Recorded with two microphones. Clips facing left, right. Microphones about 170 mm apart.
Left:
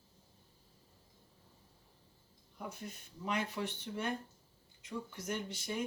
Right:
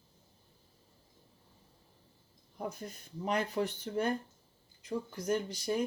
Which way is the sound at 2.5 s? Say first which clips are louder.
Right 5 dB; 40° right (ahead or behind).